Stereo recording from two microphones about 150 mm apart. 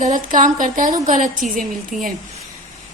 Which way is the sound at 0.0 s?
60° right (ahead or behind).